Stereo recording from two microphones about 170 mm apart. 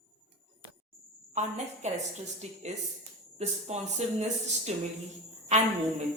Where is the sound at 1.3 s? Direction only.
45° right (ahead or behind).